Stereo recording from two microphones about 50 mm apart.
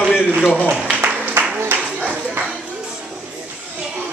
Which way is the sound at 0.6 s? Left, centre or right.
Right.